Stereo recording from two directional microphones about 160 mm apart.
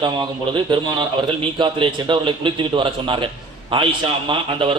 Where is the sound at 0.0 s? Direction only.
30° right (ahead or behind).